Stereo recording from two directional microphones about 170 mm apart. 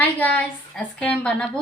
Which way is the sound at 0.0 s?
10° left (ahead or behind).